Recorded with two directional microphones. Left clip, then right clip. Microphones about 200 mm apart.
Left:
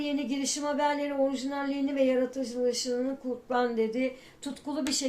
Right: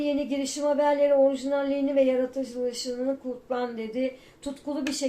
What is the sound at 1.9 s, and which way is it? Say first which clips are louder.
Speech: right 2 dB; 40° left (ahead or behind).